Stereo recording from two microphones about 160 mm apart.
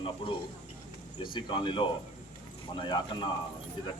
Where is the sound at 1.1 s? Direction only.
30° left (ahead or behind).